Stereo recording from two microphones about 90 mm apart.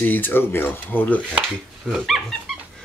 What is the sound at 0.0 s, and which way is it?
Speech, 20° left (ahead or behind).